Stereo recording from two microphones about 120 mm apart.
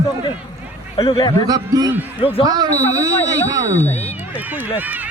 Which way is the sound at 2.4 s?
35° right (ahead or behind).